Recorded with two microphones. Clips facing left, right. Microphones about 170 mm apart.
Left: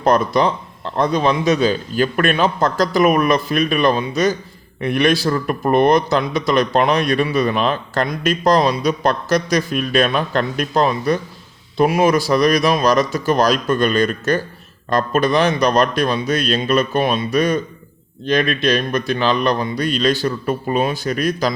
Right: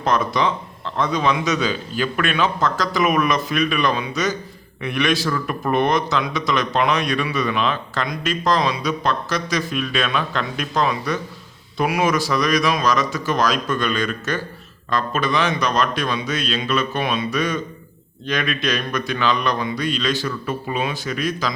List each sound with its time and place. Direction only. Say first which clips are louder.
0.0 s a man's voice: left 5 dB; 40° left (ahead or behind)
10.8 s a man's voice: left 4 dB; 35° left (ahead or behind)